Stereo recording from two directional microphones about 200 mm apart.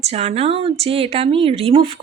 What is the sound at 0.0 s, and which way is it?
Speech, 30° right (ahead or behind).